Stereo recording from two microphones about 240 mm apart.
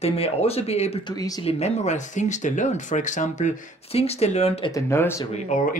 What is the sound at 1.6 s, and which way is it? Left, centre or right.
Speech, left.